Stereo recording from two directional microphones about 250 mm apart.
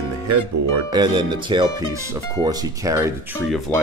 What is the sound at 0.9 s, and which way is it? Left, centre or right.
Speech, centre.